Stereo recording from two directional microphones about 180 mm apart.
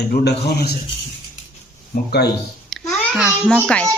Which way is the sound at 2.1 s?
65° left (ahead or behind).